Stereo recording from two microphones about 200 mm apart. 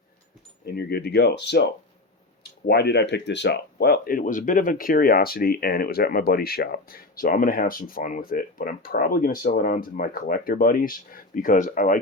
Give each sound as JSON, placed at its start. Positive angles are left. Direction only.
{"t": 0.6, "sound": "speech", "side_deg": 50}